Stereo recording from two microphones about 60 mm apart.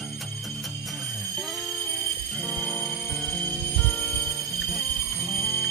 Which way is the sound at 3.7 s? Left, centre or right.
Left.